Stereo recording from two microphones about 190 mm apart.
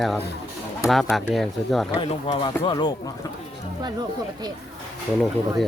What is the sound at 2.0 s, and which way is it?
Speech, 25° left (ahead or behind).